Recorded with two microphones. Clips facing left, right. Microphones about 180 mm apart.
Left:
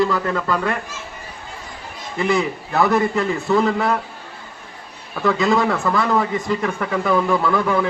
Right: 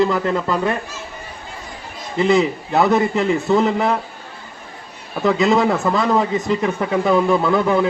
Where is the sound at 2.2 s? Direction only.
25° right (ahead or behind).